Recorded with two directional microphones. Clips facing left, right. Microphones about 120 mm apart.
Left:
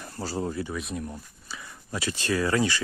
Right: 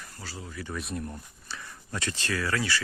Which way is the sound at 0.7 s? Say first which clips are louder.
Left 2 dB; centre (ahead or behind).